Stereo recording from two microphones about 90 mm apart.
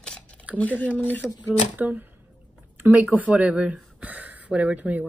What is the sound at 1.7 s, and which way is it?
Speech, 20° right (ahead or behind).